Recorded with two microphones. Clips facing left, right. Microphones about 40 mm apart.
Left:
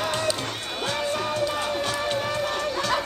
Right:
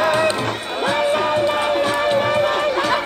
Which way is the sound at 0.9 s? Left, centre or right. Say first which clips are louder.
Right 9 dB; right.